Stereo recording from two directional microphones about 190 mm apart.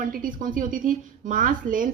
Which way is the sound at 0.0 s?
45° right (ahead or behind).